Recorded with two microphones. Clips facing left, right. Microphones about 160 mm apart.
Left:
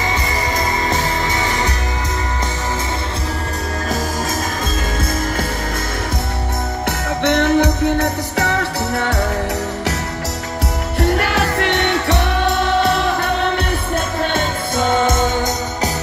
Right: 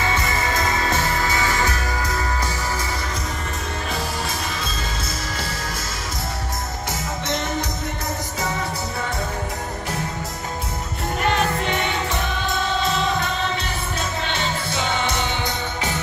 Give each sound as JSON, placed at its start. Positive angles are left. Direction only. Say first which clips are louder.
{"t": 0.0, "sound": "music", "louder": "left 2 dB", "side_deg": 15}
{"t": 7.2, "sound": "music", "louder": "left 13 dB", "side_deg": 65}
{"t": 11.0, "sound": "music", "louder": "left 5 dB", "side_deg": 80}
{"t": 14.2, "sound": "music", "louder": "left 6 dB", "side_deg": 50}